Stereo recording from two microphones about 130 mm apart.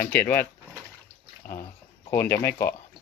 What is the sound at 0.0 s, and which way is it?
Speech, 15° left (ahead or behind).